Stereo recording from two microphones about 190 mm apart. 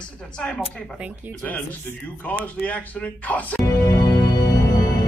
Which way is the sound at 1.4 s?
10° left (ahead or behind).